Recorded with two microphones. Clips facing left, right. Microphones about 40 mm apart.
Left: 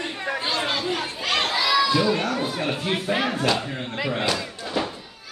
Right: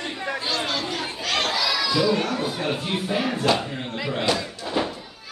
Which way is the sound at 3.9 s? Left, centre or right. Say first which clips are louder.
Left 2 dB; centre.